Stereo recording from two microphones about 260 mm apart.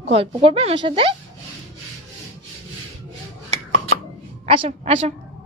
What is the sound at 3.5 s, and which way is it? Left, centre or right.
Chopping, right.